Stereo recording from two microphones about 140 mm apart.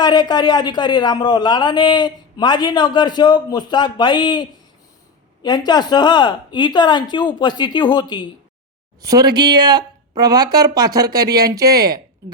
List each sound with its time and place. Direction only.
0.0 s a man's voice: 30° left (ahead or behind)
9.0 s speech: 25° right (ahead or behind)